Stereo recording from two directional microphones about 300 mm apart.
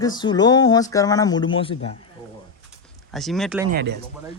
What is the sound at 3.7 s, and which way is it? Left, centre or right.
Speech, right.